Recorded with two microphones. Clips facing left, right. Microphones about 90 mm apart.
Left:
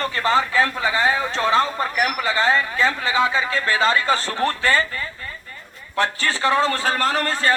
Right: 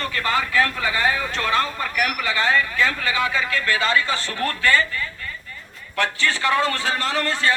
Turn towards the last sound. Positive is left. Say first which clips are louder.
# left 2 dB
turn(degrees=40)  # may be behind; listen again after turning